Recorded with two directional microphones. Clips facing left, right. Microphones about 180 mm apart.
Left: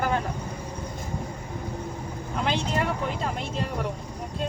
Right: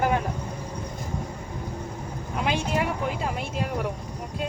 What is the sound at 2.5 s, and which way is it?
Speech, 10° right (ahead or behind).